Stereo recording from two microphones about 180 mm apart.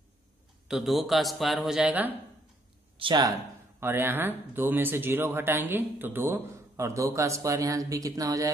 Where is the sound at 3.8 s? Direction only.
10° right (ahead or behind).